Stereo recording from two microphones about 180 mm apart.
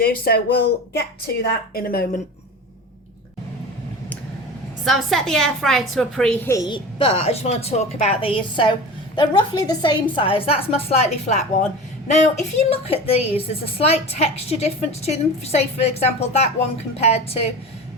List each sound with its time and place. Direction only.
0.0 s speech: 60° left (ahead or behind)
4.9 s a woman's voice: centre (ahead or behind)
6.5 s a woman's voice: 20° left (ahead or behind)